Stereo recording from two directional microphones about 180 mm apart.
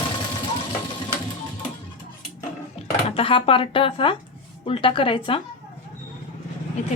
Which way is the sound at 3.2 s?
30° left (ahead or behind).